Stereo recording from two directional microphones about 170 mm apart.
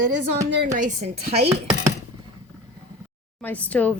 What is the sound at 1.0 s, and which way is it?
Speech, 35° right (ahead or behind).